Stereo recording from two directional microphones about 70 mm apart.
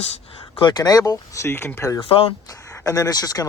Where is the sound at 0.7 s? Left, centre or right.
Left.